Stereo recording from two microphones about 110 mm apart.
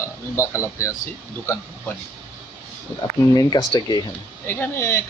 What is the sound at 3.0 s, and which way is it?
Speech, 40° left (ahead or behind).